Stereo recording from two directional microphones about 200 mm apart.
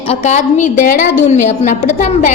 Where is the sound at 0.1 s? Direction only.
35° left (ahead or behind).